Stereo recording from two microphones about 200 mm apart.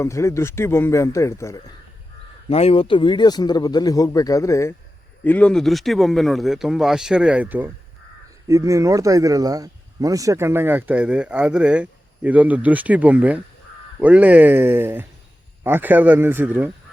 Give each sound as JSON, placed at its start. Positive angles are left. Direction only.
{"t": 0.0, "sound": "speech", "side_deg": 15}
{"t": 2.5, "sound": "speech", "side_deg": 30}